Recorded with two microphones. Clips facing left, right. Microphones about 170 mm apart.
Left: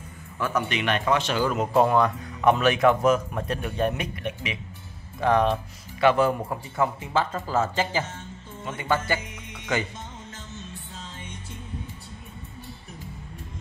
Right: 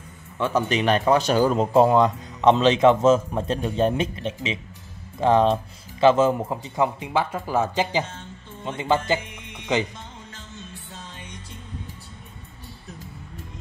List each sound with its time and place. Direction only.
0.4 s speech: 30° right (ahead or behind)